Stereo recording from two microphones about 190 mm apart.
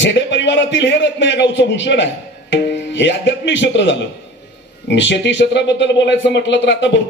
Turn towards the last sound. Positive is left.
turn(degrees=70)  # may be behind; listen again after turning